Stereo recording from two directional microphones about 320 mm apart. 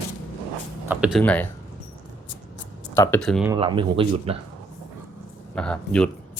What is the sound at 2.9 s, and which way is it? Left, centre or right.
Speech, centre.